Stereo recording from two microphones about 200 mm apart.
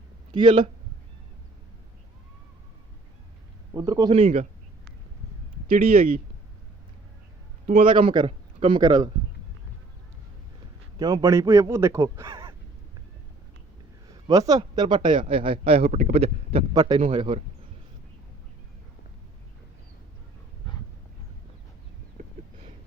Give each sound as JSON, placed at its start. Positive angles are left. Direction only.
{"t": 0.3, "sound": "speech", "side_deg": -25}
{"t": 3.8, "sound": "speech", "side_deg": -20}
{"t": 5.6, "sound": "speech", "side_deg": -45}
{"t": 8.0, "sound": "a man's voice", "side_deg": -25}
{"t": 10.9, "sound": "speech", "side_deg": -20}
{"t": 14.3, "sound": "speech", "side_deg": -20}